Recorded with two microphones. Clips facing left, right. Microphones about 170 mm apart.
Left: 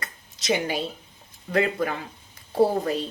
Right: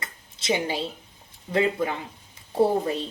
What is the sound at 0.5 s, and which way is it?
A woman's voice, 25° right (ahead or behind).